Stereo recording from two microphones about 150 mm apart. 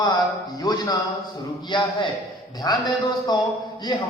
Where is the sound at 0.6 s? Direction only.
25° left (ahead or behind).